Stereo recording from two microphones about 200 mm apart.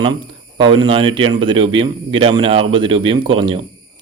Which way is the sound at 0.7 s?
25° right (ahead or behind).